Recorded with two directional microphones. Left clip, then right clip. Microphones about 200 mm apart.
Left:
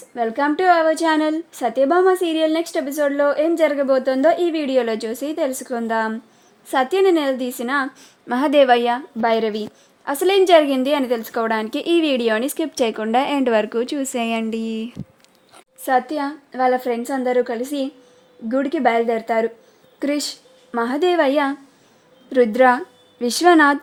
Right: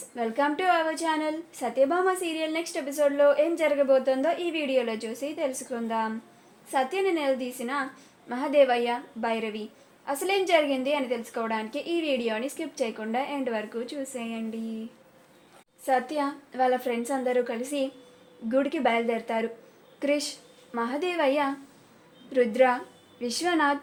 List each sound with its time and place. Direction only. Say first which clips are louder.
0.2 s a woman's voice: left 7 dB; 45° left (ahead or behind)
16.1 s a woman's voice: left 5 dB; 40° left (ahead or behind)